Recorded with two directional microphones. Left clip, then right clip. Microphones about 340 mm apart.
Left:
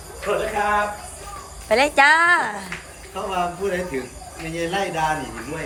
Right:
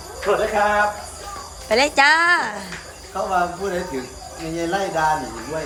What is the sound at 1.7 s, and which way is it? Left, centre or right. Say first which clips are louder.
Speech: even; centre.